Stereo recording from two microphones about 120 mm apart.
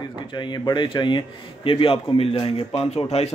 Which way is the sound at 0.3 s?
40° left (ahead or behind).